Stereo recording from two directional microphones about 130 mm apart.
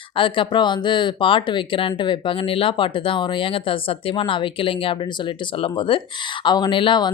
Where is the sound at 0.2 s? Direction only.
40° left (ahead or behind).